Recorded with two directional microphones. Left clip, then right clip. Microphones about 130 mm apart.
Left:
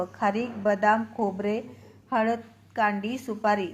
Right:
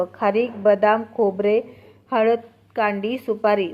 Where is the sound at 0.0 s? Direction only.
25° right (ahead or behind).